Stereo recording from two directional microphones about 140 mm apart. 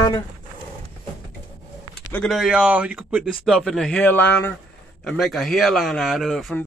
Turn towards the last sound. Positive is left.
turn(degrees=0)  # may be behind; listen again after turning